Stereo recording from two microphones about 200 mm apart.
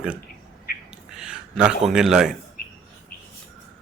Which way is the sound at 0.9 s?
5° right (ahead or behind).